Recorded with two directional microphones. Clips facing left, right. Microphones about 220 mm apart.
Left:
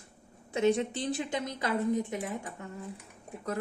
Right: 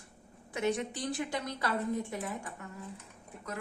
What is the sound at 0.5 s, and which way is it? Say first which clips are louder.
A woman's voice: left 5 dB; 25° left (ahead or behind).